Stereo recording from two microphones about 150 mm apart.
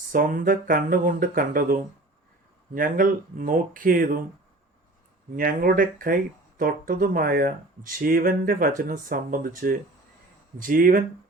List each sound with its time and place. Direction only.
0.1 s speech: 65° right (ahead or behind)
5.4 s speech: 70° right (ahead or behind)